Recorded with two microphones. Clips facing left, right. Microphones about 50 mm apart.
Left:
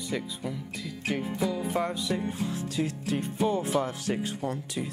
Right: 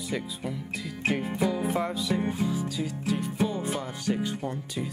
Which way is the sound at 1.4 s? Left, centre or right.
Centre.